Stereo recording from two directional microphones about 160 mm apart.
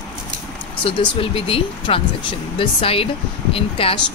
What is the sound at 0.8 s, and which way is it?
Speech, 35° left (ahead or behind).